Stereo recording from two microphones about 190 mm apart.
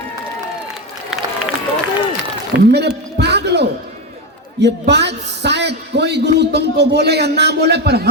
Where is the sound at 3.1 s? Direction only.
60° right (ahead or behind).